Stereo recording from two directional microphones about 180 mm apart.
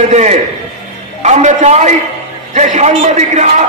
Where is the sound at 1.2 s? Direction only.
40° right (ahead or behind).